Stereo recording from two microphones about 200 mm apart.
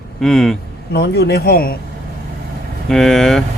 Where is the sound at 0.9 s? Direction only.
55° left (ahead or behind).